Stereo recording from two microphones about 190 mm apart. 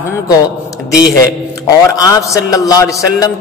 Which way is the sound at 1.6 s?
20° left (ahead or behind).